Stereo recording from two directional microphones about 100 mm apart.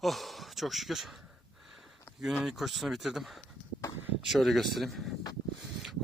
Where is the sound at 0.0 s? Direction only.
Centre (ahead or behind).